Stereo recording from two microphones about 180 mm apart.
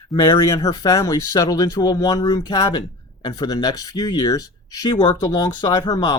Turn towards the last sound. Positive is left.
turn(degrees=25)  # may be behind; listen again after turning